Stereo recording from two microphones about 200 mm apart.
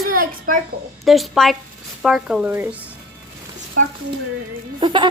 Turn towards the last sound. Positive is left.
turn(degrees=-25)  # may be behind; listen again after turning